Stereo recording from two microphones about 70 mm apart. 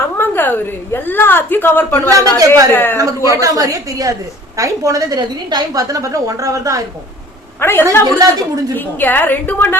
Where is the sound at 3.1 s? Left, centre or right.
Right.